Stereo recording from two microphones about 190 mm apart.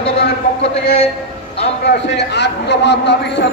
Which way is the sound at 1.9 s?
65° left (ahead or behind).